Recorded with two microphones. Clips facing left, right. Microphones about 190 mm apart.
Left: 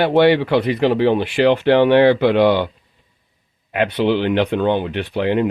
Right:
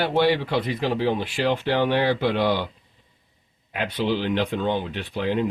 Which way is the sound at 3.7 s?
65° left (ahead or behind).